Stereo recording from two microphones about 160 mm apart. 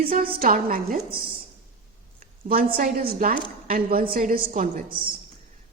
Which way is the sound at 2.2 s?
65° right (ahead or behind).